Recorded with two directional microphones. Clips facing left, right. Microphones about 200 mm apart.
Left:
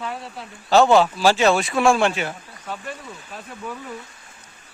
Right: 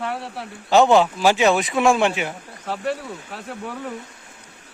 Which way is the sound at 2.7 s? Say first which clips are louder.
Right 7 dB; 75° right (ahead or behind).